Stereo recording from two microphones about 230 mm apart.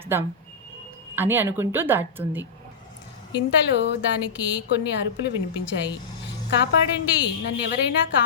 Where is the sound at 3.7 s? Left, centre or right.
Left.